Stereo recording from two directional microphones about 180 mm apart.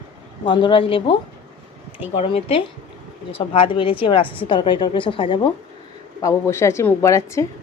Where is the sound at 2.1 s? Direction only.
30° left (ahead or behind).